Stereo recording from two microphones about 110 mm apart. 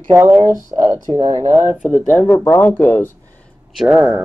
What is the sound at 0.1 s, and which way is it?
Speech, 25° right (ahead or behind).